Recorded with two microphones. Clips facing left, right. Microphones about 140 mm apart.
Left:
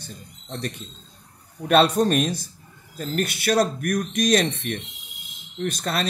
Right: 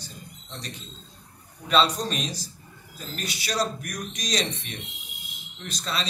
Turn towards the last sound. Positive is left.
turn(degrees=55)  # may be behind; listen again after turning